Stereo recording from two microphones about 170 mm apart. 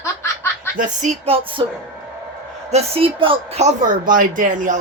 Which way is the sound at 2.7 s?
35° right (ahead or behind).